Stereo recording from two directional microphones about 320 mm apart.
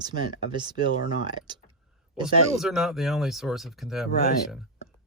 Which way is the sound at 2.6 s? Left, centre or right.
Centre.